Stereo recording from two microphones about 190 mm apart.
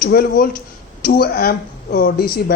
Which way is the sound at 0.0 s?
50° left (ahead or behind).